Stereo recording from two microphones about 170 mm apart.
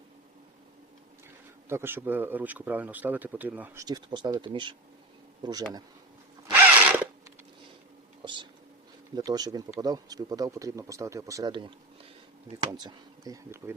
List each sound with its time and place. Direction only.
1.7 s speech: 15° right (ahead or behind)
3.8 s speech: 25° right (ahead or behind)
6.5 s a sound: 10° right (ahead or behind)
9.1 s speech: 25° right (ahead or behind)